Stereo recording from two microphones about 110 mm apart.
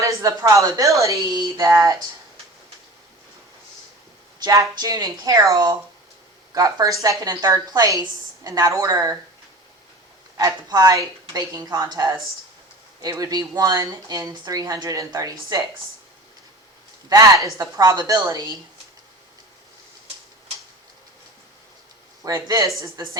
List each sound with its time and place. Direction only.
0.0 s speech: 30° right (ahead or behind)
1.0 s a sound: 30° right (ahead or behind)
4.4 s a sound: 30° right (ahead or behind)
4.7 s speech: 35° right (ahead or behind)
10.3 s speech: 30° right (ahead or behind)
17.1 s speech: 30° right (ahead or behind)
22.2 s speech: 35° right (ahead or behind)